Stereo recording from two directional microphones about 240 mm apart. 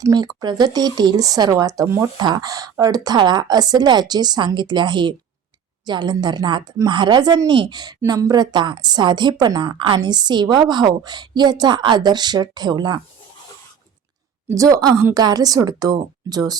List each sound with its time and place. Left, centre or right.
0.0 s speech: centre
14.5 s speech: centre